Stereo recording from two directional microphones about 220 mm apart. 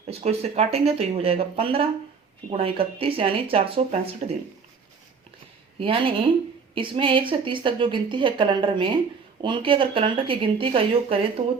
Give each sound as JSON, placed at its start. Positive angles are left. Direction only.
{"t": 0.1, "sound": "a woman's voice", "side_deg": -30}
{"t": 5.8, "sound": "a woman's voice", "side_deg": -25}